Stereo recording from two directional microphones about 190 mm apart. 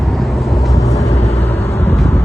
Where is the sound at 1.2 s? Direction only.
35° left (ahead or behind).